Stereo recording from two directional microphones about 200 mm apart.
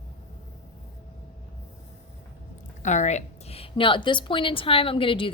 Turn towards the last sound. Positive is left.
turn(degrees=25)  # may be behind; listen again after turning